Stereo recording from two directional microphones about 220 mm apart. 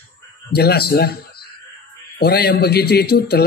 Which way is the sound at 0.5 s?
45° left (ahead or behind).